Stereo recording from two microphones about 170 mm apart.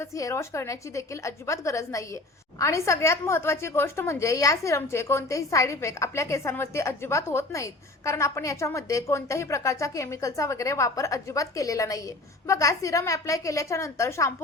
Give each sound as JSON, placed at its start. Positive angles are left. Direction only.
{"t": 0.0, "sound": "a woman's voice", "side_deg": 20}